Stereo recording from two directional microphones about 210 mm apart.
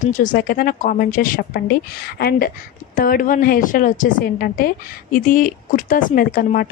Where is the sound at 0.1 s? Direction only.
40° left (ahead or behind).